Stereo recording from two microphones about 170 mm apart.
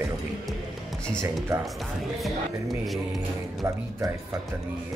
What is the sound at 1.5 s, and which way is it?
Speech, 20° right (ahead or behind).